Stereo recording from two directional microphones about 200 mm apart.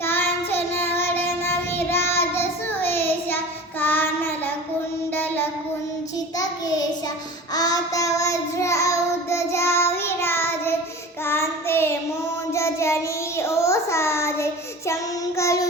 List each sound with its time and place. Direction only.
0.0 s child singing: 10° left (ahead or behind)
5.1 s a sound: 10° left (ahead or behind)
6.4 s child singing: 20° left (ahead or behind)